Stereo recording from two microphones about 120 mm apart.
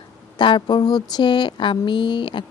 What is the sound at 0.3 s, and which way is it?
Speech, 40° left (ahead or behind).